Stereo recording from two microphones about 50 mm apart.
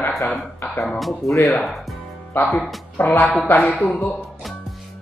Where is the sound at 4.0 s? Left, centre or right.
Left.